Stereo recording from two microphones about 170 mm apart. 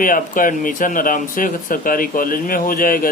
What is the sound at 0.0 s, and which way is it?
Speech, 50° left (ahead or behind).